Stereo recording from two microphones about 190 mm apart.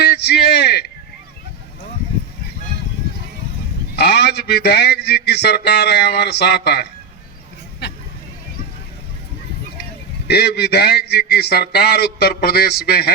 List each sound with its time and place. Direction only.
0.0 s a sound: 60° left (ahead or behind)
3.9 s a man's voice: 60° left (ahead or behind)
7.8 s vehicle: 65° left (ahead or behind)
10.2 s a man's voice: 60° left (ahead or behind)